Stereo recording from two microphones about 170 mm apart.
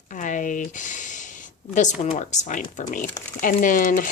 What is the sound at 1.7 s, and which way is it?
Speech, 45° left (ahead or behind).